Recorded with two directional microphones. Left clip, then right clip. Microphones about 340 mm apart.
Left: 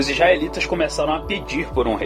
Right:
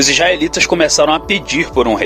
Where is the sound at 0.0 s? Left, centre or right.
Centre.